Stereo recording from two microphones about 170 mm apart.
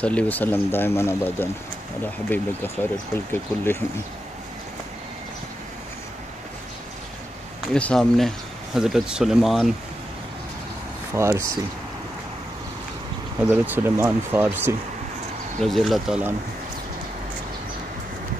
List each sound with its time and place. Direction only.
0.0 s speech: 10° left (ahead or behind)
7.7 s speech: 5° left (ahead or behind)
11.1 s speech: 15° right (ahead or behind)
13.5 s speech: 10° right (ahead or behind)
15.6 s speech: centre (ahead or behind)